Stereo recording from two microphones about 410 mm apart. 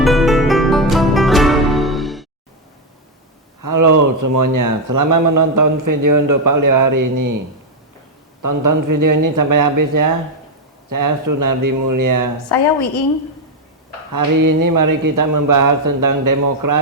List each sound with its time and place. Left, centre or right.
0.0 s music: centre
3.6 s speech: right
8.4 s speech: right
12.5 s a woman's voice: left
14.1 s speech: right